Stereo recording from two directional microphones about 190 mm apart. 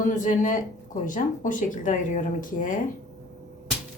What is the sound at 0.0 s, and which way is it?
Speech, 40° left (ahead or behind).